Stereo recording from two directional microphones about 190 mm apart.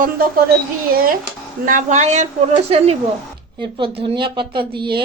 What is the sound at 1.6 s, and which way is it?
A woman's voice, 45° right (ahead or behind).